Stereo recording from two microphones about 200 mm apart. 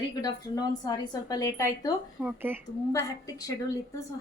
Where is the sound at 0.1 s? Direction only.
20° left (ahead or behind).